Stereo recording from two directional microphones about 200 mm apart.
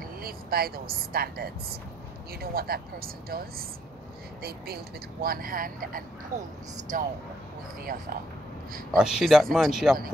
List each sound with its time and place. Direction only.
0.2 s speech: 50° right (ahead or behind)
8.9 s speech: 5° right (ahead or behind)